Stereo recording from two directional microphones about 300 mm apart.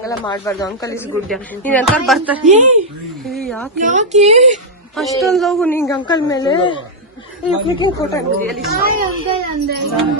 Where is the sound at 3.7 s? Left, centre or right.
Right.